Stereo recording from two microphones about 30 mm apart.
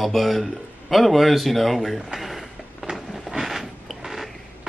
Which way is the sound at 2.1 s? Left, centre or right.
Centre.